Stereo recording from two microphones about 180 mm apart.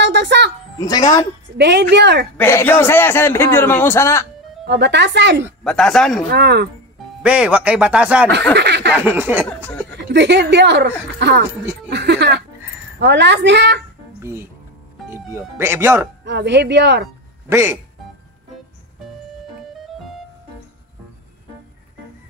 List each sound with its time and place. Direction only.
0.0 s music: 75° right (ahead or behind)
0.7 s speech: 20° left (ahead or behind)
1.6 s a woman's voice: 70° right (ahead or behind)
2.3 s a man's voice: 10° left (ahead or behind)
4.6 s a woman's voice: 70° right (ahead or behind)
5.6 s speech: 5° left (ahead or behind)
6.3 s a woman's voice: 70° right (ahead or behind)
7.2 s speech: 5° right (ahead or behind)
8.5 s a sound: 70° right (ahead or behind)
8.9 s speech: 10° right (ahead or behind)
10.1 s a woman's voice: 75° right (ahead or behind)
14.2 s speech: 15° right (ahead or behind)
16.3 s a woman's voice: 75° right (ahead or behind)
17.5 s speech: 15° right (ahead or behind)